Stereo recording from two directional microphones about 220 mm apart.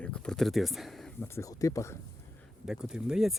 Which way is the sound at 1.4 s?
15° left (ahead or behind).